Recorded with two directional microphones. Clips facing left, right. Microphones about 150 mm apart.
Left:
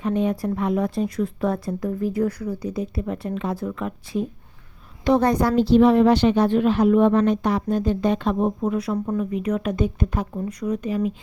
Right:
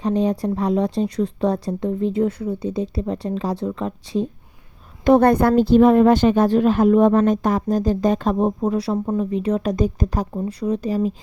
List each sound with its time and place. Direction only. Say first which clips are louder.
0.0 s a woman's voice: right 3 dB; 35° right (ahead or behind)
5.0 s a woman's voice: right 5 dB; 55° right (ahead or behind); by 11.1 s 35° right (ahead or behind)